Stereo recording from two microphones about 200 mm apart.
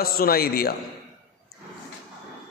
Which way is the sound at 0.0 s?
50° left (ahead or behind).